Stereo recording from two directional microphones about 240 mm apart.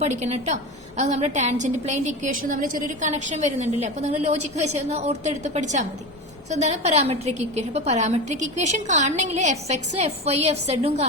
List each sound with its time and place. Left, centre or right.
0.0 s a woman's voice: right